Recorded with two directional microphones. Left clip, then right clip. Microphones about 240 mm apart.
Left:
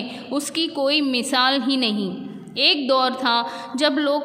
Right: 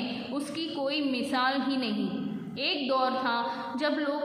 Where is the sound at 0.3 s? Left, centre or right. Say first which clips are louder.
Left 9 dB; left.